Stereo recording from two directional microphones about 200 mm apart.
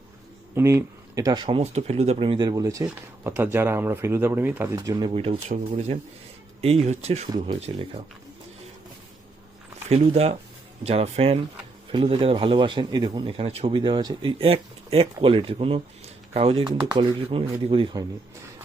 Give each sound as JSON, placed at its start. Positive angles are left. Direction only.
{"t": 0.5, "sound": "a man's voice", "side_deg": -15}
{"t": 7.3, "sound": "a man's voice", "side_deg": -20}
{"t": 9.9, "sound": "a man's voice", "side_deg": -30}